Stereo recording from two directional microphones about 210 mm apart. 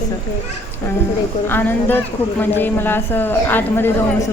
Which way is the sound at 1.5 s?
10° left (ahead or behind).